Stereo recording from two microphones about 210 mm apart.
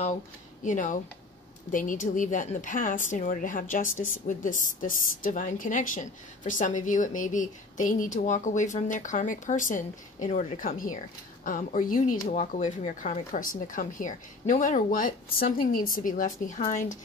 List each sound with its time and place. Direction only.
0.7 s a woman's voice: 35° left (ahead or behind)